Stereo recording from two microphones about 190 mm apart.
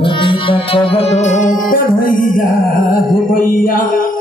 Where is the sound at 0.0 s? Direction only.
25° left (ahead or behind).